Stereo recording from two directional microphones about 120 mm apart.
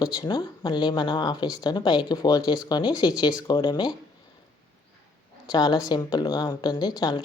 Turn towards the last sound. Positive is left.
turn(degrees=35)  # may be behind; listen again after turning